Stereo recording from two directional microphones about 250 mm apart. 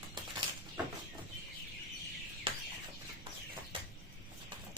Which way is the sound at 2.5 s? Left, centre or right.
Centre.